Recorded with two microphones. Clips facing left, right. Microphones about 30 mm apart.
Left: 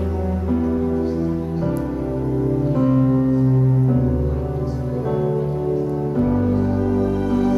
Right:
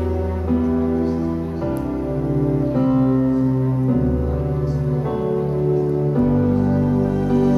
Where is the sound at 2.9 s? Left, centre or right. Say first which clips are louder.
Right 1 dB; centre.